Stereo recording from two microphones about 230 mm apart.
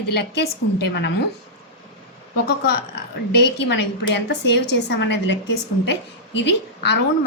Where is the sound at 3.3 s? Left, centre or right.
Left.